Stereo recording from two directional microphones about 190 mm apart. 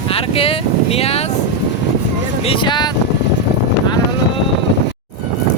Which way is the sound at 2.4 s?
30° left (ahead or behind).